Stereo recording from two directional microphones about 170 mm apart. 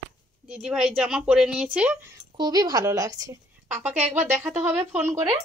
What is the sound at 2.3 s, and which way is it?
A woman's voice, 25° right (ahead or behind).